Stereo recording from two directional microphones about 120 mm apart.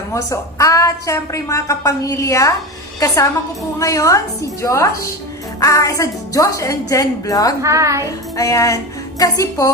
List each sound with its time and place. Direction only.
0.1 s a woman's voice: 25° left (ahead or behind)
3.8 s a woman's voice: 25° left (ahead or behind)
7.6 s a child's voice: 25° right (ahead or behind)
8.0 s a woman's voice: 25° left (ahead or behind)